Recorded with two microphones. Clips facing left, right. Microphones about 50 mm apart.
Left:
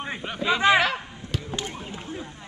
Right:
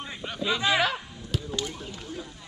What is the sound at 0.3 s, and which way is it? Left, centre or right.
Speech, centre.